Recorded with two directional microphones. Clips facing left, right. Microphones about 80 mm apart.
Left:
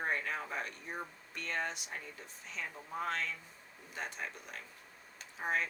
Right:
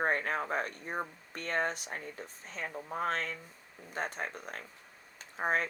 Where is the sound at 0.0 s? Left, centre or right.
Right.